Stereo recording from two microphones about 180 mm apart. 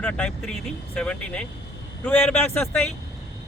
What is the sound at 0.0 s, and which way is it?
Speech, 5° left (ahead or behind).